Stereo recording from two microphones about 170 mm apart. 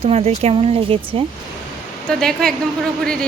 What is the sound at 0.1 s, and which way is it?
Speech, 40° right (ahead or behind).